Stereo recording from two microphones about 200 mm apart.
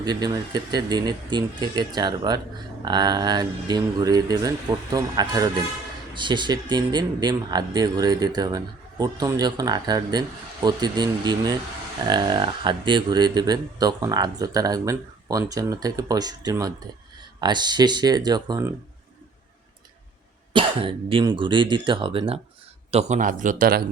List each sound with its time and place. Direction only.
0.0 s speech: 20° right (ahead or behind)
20.6 s a man's voice: 25° right (ahead or behind); by 23.8 s 45° right (ahead or behind)